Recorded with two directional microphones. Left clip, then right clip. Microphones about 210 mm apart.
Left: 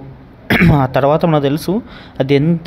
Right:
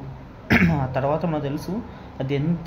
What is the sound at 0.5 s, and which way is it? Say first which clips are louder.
Speech: left 8 dB; 45° left (ahead or behind).